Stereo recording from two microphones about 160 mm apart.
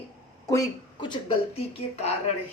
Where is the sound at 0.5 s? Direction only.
25° left (ahead or behind).